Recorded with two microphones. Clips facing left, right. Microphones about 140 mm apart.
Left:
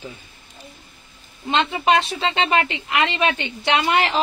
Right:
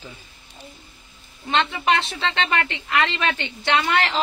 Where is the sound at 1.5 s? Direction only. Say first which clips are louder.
Left 3 dB; 20° left (ahead or behind).